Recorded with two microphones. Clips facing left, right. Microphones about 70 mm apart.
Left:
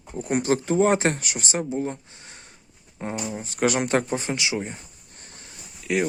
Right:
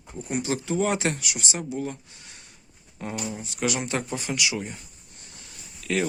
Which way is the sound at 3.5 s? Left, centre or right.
Left.